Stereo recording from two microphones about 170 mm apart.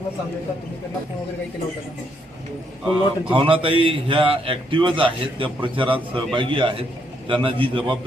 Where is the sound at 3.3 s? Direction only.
30° right (ahead or behind).